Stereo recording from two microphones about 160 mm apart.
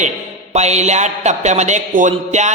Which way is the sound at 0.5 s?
45° right (ahead or behind).